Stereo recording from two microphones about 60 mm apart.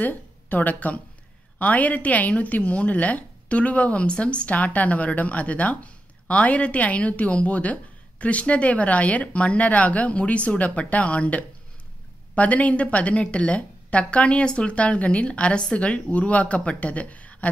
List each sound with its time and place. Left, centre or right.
0.0 s a woman's voice: left